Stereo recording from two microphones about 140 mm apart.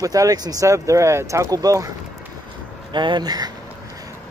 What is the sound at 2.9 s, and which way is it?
Speech, 35° right (ahead or behind).